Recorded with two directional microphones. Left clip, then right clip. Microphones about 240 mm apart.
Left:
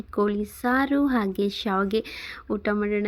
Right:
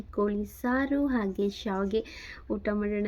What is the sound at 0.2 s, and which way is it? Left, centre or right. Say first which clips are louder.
Speech: left 5 dB; centre.